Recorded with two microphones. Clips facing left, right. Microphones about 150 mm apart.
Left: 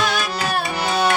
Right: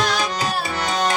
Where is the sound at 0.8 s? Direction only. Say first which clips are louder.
Left 2 dB; 10° left (ahead or behind).